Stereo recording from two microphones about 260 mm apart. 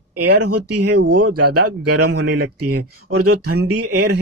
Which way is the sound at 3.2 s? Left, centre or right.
Right.